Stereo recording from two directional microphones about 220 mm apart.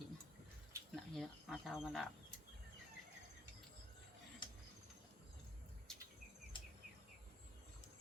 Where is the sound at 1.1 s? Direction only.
Centre (ahead or behind).